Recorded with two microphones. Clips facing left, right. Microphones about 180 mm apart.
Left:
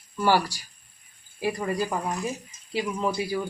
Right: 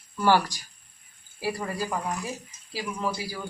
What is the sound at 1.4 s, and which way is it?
Speech, 20° left (ahead or behind).